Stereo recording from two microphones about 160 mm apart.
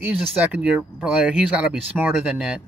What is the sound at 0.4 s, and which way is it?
Speech, 10° right (ahead or behind).